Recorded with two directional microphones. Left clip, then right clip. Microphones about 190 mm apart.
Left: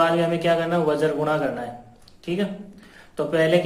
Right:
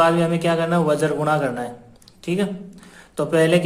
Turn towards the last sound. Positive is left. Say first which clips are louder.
# right 2 dB
turn(degrees=-40)  # may be behind; listen again after turning